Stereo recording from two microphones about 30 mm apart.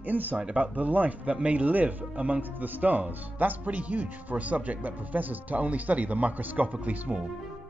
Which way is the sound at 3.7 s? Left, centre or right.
Right.